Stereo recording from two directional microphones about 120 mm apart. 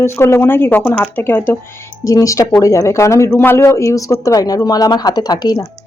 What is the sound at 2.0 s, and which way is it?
Speech, 25° left (ahead or behind).